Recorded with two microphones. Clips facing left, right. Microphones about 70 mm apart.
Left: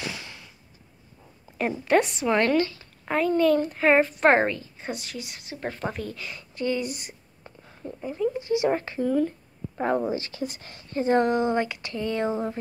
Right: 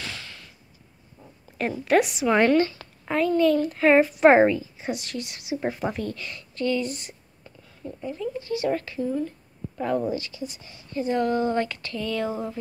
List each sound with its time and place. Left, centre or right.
0.0 s a sound: centre
1.6 s a woman's voice: centre
2.3 s speech: centre
3.1 s a woman's voice: centre
7.4 s a sound: left
8.1 s speech: left
10.3 s speech: left
11.0 s speech: left; by 11.9 s centre
11.9 s speech: left